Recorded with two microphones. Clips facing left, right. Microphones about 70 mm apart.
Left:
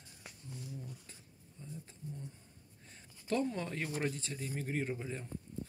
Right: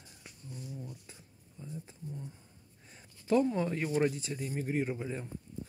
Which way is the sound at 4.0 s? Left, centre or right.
Centre.